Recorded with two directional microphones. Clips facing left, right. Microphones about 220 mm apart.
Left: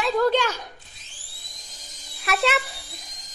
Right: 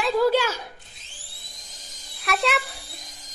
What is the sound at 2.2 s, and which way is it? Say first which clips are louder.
Speech: left 1 dB; centre (ahead or behind).